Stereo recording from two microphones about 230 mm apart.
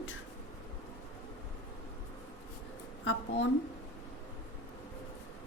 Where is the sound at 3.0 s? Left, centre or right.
Left.